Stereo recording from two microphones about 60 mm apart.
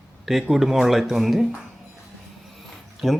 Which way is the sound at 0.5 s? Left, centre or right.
Centre.